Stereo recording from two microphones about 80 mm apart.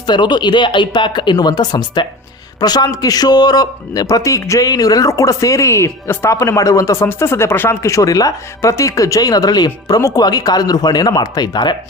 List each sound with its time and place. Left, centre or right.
0.0 s a man's voice: left